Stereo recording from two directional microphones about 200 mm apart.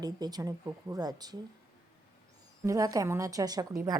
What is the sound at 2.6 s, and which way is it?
A woman's voice, 15° right (ahead or behind).